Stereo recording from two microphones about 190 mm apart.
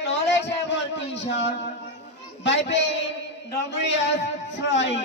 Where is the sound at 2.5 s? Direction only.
70° left (ahead or behind).